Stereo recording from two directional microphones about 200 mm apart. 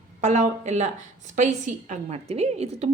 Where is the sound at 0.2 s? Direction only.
35° right (ahead or behind).